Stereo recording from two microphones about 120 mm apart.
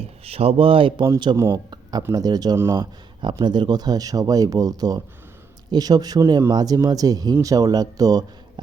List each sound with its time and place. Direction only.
0.3 s speech: 55° right (ahead or behind)
1.4 s speech: 30° right (ahead or behind)
2.6 s speech: 20° right (ahead or behind)
3.2 s speech: 40° right (ahead or behind)